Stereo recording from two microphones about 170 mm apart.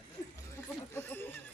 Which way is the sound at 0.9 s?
10° left (ahead or behind).